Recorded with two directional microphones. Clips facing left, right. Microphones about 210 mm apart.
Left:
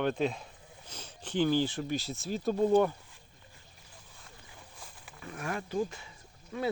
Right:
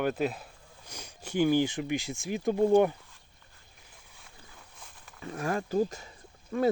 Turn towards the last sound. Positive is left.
turn(degrees=-45)  # may be behind; listen again after turning